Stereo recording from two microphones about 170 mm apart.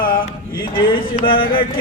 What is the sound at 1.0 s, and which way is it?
Music, 30° left (ahead or behind).